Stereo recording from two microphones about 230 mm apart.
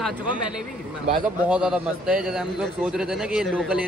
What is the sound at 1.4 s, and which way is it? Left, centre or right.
A man's voice, centre.